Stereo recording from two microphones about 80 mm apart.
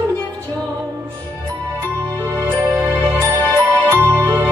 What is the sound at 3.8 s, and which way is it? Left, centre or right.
Music, right.